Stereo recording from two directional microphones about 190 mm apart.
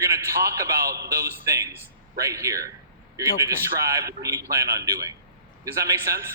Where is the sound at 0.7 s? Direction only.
55° right (ahead or behind).